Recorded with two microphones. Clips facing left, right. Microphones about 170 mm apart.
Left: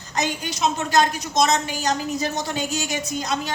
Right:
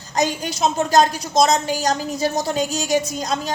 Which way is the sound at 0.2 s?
35° right (ahead or behind).